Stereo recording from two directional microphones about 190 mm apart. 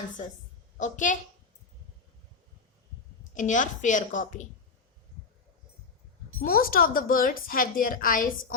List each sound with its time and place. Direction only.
0.8 s a woman's voice: 40° left (ahead or behind)
3.3 s a woman's voice: 40° left (ahead or behind)
6.4 s a woman's voice: 50° left (ahead or behind)